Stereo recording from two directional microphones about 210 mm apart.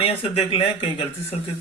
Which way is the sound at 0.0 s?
25° left (ahead or behind).